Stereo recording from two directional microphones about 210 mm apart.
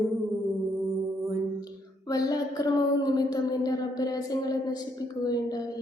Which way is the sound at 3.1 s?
20° left (ahead or behind).